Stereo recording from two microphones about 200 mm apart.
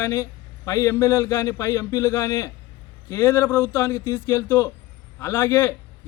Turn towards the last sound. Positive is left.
turn(degrees=10)  # may be behind; listen again after turning